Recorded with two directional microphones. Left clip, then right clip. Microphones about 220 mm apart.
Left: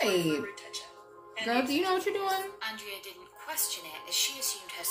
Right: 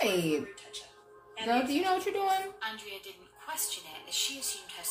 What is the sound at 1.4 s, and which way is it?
A woman's voice, 5° right (ahead or behind).